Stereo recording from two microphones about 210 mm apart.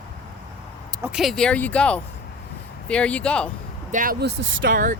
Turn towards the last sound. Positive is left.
turn(degrees=-40)  # may be behind; listen again after turning